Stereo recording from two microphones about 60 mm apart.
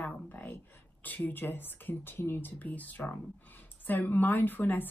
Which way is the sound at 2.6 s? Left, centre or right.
Left.